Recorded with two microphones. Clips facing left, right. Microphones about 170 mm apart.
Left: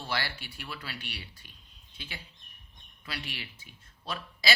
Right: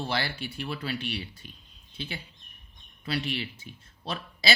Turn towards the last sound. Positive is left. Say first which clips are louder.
# right 2 dB
turn(degrees=-25)  # may be behind; listen again after turning